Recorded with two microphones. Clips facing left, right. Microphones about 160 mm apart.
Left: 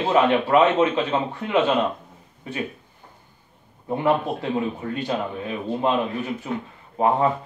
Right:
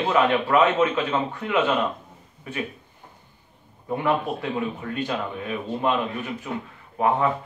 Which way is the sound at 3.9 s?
30° left (ahead or behind).